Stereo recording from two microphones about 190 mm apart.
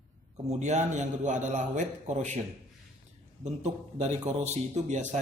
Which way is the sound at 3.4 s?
35° right (ahead or behind).